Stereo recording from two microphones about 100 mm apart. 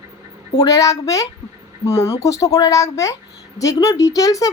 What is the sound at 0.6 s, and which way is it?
Speech, 35° left (ahead or behind).